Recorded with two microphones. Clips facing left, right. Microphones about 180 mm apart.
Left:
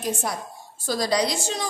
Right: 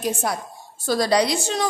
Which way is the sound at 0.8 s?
65° right (ahead or behind).